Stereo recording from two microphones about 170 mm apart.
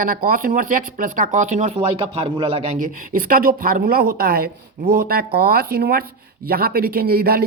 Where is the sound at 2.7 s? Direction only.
55° right (ahead or behind).